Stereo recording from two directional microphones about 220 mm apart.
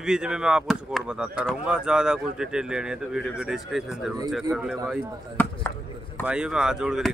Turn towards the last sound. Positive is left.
turn(degrees=-5)  # may be behind; listen again after turning